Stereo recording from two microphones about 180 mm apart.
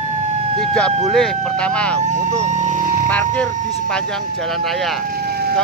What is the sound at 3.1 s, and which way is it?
Speech, 5° left (ahead or behind).